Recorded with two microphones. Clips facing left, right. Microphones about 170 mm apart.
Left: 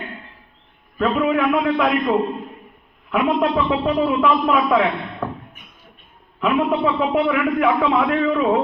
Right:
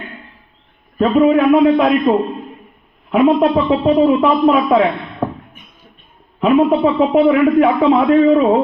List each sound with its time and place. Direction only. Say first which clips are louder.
0.9 s a man's voice: right 7 dB; 30° right (ahead or behind)
6.4 s a man's voice: right 7 dB; 30° right (ahead or behind)